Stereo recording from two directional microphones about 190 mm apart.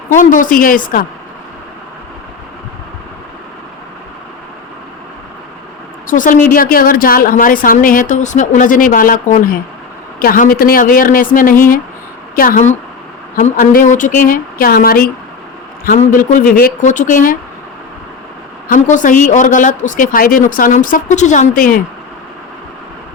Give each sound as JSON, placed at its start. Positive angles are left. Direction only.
{"t": 0.1, "sound": "a woman's voice", "side_deg": 45}
{"t": 6.1, "sound": "a woman's voice", "side_deg": 45}
{"t": 18.7, "sound": "a woman's voice", "side_deg": 45}